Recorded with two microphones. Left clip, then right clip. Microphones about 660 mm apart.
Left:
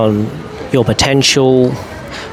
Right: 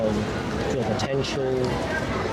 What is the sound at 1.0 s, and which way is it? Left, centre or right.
Speech, left.